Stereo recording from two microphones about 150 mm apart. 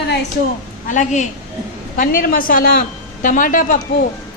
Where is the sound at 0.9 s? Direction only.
55° left (ahead or behind).